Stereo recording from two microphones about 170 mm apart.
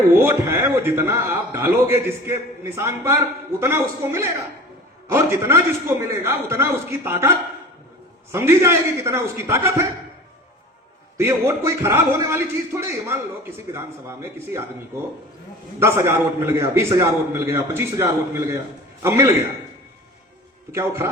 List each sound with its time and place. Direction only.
0.1 s a man's voice: 15° right (ahead or behind)
11.2 s a man's voice: 15° right (ahead or behind)
15.8 s a man's voice: 15° right (ahead or behind)
20.7 s a man's voice: 15° right (ahead or behind)